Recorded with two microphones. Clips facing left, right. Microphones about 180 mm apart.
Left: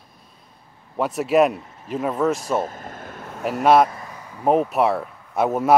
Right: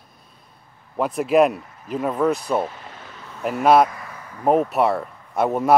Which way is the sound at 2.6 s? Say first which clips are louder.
Left 1 dB; 45° left (ahead or behind).